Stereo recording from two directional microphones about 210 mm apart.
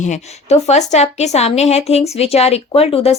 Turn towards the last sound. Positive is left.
turn(degrees=30)  # may be behind; listen again after turning